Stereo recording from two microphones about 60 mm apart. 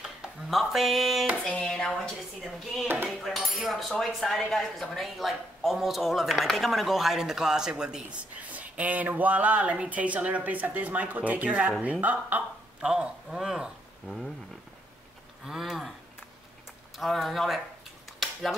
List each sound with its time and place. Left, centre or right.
0.0 s speech: centre
1.3 s a sound: centre
1.7 s a woman's voice: centre
3.1 s a man's voice: centre
8.5 s speech: right
12.8 s speech: centre
15.4 s speech: centre
16.9 s speech: centre